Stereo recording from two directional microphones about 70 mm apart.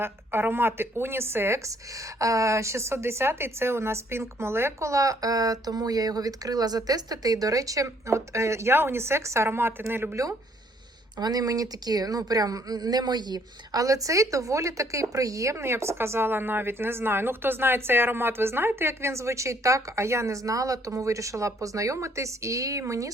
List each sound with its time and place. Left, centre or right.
0.0 s a woman's voice: right
11.2 s a woman's voice: right
13.8 s a woman's voice: right